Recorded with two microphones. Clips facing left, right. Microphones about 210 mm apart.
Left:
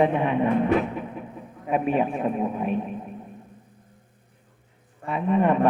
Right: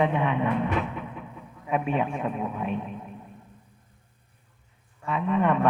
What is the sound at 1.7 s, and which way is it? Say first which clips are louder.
Speech: left 3 dB; 35° left (ahead or behind).